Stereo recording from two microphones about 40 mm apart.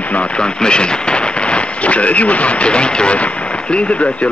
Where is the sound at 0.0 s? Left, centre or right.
Left.